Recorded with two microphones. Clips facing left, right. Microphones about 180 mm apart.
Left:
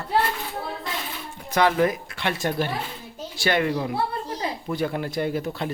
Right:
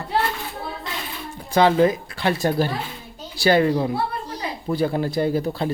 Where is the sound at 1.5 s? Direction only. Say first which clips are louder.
Right 4 dB; 30° right (ahead or behind).